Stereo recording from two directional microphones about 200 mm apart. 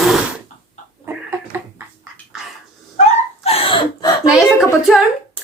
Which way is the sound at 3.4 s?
30° left (ahead or behind).